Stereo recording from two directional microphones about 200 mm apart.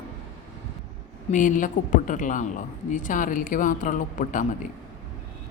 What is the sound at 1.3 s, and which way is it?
A woman's voice, 40° left (ahead or behind).